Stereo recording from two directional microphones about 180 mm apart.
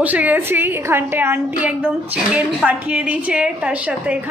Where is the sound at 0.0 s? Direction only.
10° right (ahead or behind).